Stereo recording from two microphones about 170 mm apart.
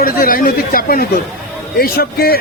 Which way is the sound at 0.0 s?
60° left (ahead or behind).